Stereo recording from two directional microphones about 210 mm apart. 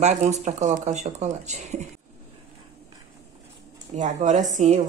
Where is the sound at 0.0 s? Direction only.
35° right (ahead or behind).